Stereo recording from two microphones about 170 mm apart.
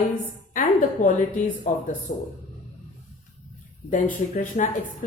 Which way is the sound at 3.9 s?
45° left (ahead or behind).